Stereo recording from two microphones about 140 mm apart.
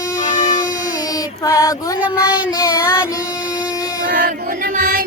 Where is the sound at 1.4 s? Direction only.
25° left (ahead or behind).